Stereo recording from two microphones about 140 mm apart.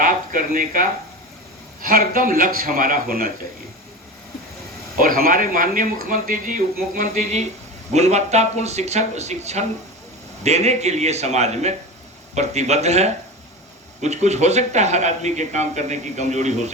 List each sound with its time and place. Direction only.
0.0 s a man's voice: 75° right (ahead or behind); by 3.3 s 90° right
4.9 s speech: 90° right; by 16.7 s 55° right (ahead or behind)